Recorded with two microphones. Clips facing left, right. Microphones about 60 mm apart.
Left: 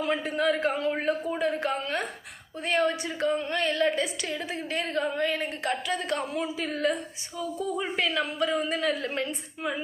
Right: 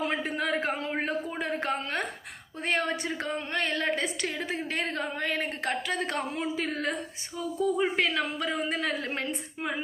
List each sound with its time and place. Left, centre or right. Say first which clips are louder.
0.0 s a woman's voice: left 3 dB; right